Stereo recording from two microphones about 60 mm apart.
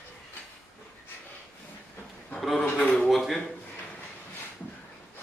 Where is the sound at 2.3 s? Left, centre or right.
Centre.